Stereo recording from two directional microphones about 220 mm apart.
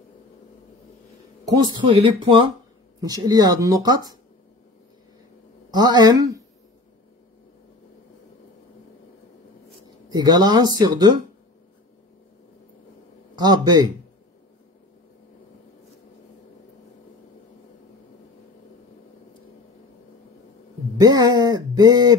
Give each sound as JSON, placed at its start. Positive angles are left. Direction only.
{"t": 1.6, "sound": "speech", "side_deg": -20}
{"t": 5.7, "sound": "speech", "side_deg": -20}
{"t": 10.0, "sound": "speech", "side_deg": -20}
{"t": 13.4, "sound": "speech", "side_deg": -20}
{"t": 21.0, "sound": "speech", "side_deg": -20}